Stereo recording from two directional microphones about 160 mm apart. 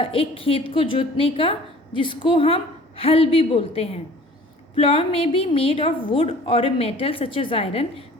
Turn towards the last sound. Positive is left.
turn(degrees=35)  # may be behind; listen again after turning